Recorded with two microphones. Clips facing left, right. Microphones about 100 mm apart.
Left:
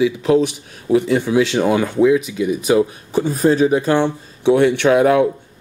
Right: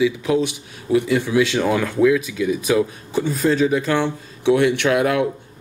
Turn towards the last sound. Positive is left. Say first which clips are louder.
# left 5 dB
turn(degrees=30)  # may be behind; listen again after turning